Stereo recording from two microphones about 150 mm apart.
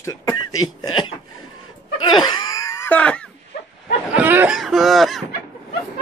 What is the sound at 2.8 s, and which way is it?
Wail, 10° left (ahead or behind).